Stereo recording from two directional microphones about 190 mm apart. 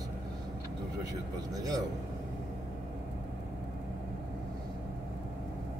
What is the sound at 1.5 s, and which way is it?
Speech, 20° right (ahead or behind).